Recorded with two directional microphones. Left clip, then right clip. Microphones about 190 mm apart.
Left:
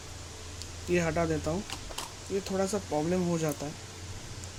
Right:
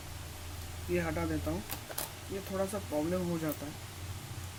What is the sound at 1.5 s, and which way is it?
Speech, 40° left (ahead or behind).